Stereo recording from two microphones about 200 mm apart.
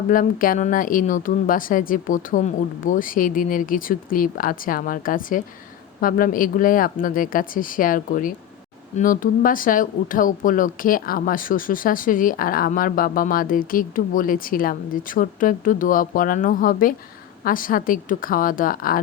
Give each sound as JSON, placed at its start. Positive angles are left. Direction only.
{"t": 0.1, "sound": "speech", "side_deg": 45}